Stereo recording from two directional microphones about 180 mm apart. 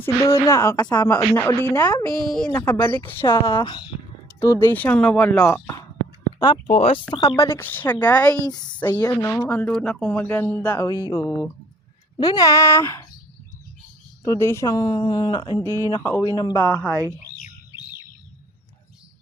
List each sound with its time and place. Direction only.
0.0 s speech: 15° left (ahead or behind)
2.2 s speech: 5° left (ahead or behind)
3.2 s a woman's voice: 25° left (ahead or behind)
4.4 s speech: 15° left (ahead or behind)
6.7 s speech: 35° left (ahead or behind)
7.4 s speech: 15° left (ahead or behind)
10.8 s a woman's voice: 20° left (ahead or behind)
14.3 s a woman's voice: 15° left (ahead or behind)
15.6 s speech: 20° right (ahead or behind)
15.9 s a woman's voice: 15° left (ahead or behind)